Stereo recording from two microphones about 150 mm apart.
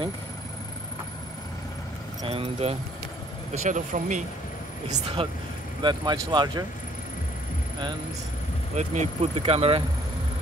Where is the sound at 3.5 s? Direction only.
55° right (ahead or behind).